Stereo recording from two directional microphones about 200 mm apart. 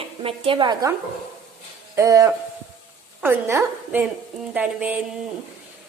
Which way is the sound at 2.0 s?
15° right (ahead or behind).